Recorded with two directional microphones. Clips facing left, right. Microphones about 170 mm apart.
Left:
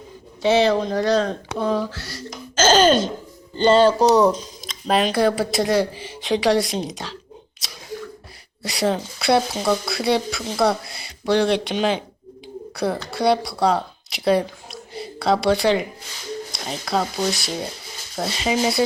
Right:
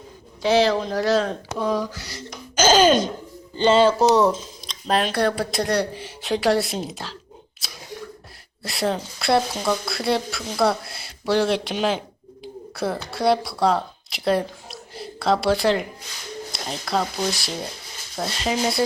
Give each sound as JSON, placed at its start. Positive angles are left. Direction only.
{"t": 0.4, "sound": "speech", "side_deg": 0}
{"t": 1.9, "sound": "a sound", "side_deg": -20}
{"t": 2.6, "sound": "speech", "side_deg": -10}
{"t": 8.6, "sound": "speech", "side_deg": 0}